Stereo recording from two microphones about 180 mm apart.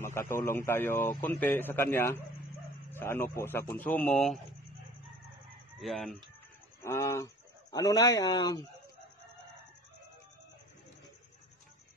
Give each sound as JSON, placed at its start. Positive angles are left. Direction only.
{"t": 0.0, "sound": "speech", "side_deg": 15}
{"t": 5.8, "sound": "speech", "side_deg": 0}
{"t": 6.8, "sound": "speech", "side_deg": 15}